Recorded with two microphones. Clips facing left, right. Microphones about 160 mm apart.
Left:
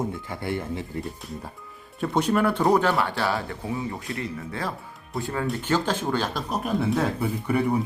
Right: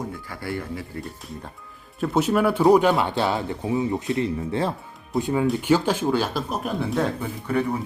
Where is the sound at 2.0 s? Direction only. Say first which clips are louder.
Right 2 dB; 5° right (ahead or behind).